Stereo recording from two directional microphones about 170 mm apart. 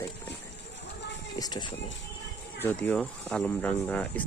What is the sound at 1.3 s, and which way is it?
Speech, 20° left (ahead or behind).